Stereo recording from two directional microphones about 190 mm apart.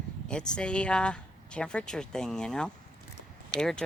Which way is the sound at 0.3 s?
5° left (ahead or behind).